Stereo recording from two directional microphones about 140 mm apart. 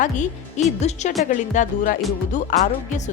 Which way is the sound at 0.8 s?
50° left (ahead or behind).